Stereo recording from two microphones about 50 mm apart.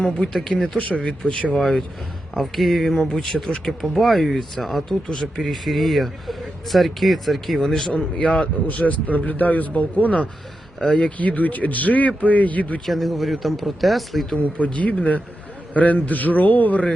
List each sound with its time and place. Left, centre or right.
0.2 s speech: centre
0.8 s speech: left
2.3 s a man's voice: centre
7.6 s speech: centre; by 12.8 s left
12.8 s a man's voice: centre
14.6 s speech: left